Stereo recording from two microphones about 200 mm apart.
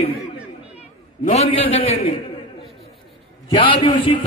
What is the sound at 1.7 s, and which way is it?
Speech, 30° left (ahead or behind).